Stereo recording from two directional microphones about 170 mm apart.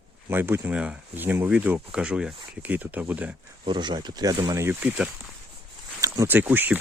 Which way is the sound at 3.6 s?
25° right (ahead or behind).